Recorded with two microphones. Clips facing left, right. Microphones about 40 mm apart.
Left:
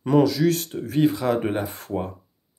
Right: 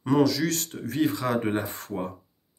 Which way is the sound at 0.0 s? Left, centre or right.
Centre.